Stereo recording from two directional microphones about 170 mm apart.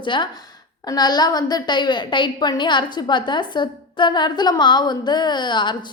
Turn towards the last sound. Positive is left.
turn(degrees=25)  # may be behind; listen again after turning